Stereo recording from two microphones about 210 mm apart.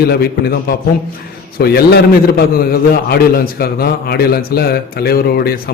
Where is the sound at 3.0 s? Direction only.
45° left (ahead or behind).